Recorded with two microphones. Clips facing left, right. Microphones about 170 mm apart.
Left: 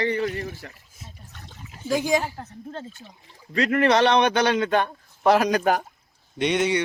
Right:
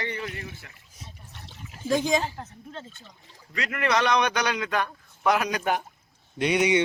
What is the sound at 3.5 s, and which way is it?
A man's voice, 35° left (ahead or behind).